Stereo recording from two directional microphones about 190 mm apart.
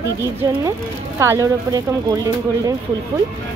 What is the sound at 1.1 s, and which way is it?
Speech, 15° right (ahead or behind).